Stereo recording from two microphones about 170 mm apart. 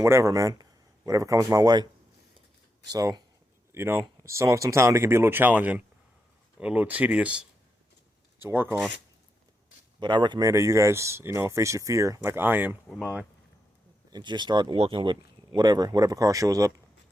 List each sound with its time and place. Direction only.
0.0 s speech: 15° right (ahead or behind)
2.9 s speech: 20° right (ahead or behind)
10.0 s speech: 25° right (ahead or behind); by 12.7 s 10° right (ahead or behind)
14.1 s speech: 25° right (ahead or behind)